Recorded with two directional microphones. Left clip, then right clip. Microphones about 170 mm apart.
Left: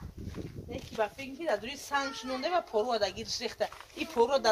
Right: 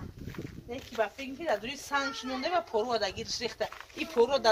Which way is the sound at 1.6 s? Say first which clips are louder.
Right 1 dB; 70° left (ahead or behind).